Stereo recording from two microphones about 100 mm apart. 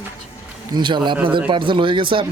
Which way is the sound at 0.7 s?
50° right (ahead or behind).